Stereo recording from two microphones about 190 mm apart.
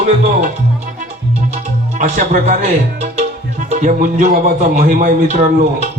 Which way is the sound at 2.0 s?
40° right (ahead or behind).